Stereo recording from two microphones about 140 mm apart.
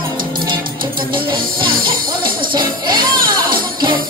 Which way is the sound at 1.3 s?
35° right (ahead or behind).